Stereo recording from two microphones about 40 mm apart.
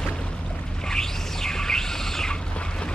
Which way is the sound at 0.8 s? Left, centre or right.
Centre.